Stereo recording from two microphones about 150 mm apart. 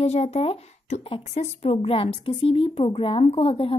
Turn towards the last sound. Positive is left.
turn(degrees=35)  # may be behind; listen again after turning